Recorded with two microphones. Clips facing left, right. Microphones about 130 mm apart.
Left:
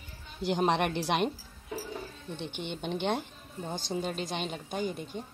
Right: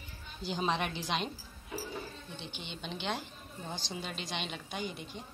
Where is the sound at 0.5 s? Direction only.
65° left (ahead or behind).